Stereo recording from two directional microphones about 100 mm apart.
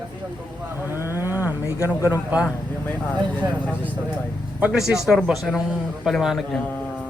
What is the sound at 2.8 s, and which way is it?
Speech, 15° left (ahead or behind).